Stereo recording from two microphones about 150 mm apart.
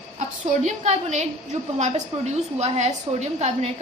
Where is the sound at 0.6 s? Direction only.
50° right (ahead or behind).